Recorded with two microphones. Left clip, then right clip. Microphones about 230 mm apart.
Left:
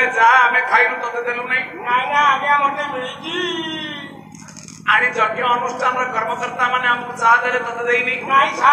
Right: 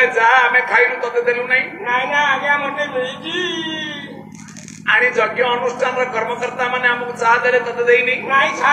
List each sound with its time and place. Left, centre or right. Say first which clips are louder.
0.0 s a man's voice: even; left
4.8 s a man's voice: right 1 dB; left